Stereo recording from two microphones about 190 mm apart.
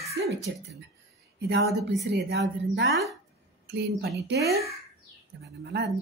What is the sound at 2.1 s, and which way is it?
Speech, 60° right (ahead or behind).